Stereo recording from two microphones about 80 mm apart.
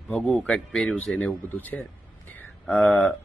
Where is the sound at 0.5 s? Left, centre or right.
Centre.